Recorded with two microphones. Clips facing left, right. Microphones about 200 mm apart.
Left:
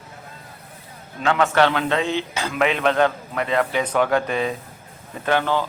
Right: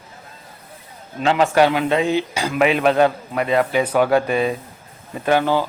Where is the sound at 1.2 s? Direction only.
30° right (ahead or behind).